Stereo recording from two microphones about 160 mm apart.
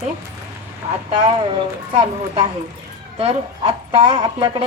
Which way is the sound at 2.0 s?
30° right (ahead or behind).